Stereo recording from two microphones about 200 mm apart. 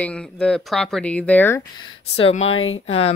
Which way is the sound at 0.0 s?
5° left (ahead or behind).